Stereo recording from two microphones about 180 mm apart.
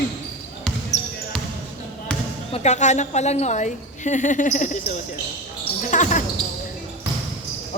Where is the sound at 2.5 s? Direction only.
40° left (ahead or behind).